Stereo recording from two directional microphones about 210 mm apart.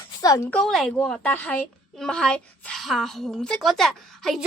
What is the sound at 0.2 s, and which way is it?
Speech, 15° left (ahead or behind).